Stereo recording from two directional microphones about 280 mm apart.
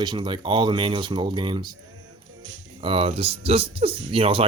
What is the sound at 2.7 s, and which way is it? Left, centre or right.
Speech, centre.